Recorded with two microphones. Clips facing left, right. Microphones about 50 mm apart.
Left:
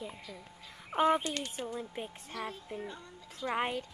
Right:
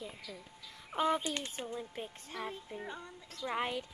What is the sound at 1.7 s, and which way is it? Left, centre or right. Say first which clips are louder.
Speech: left 2 dB; centre.